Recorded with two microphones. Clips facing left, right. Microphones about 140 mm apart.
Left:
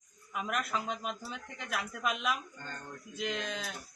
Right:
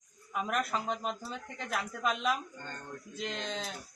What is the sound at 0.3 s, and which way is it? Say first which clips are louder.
Speech: right 2 dB; 35° right (ahead or behind).